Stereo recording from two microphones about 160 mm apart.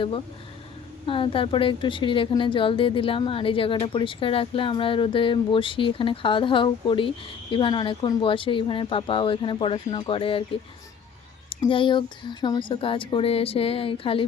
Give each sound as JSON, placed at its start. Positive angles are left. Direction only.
{"t": 1.0, "sound": "a woman's voice", "side_deg": 35}
{"t": 11.7, "sound": "a woman's voice", "side_deg": 30}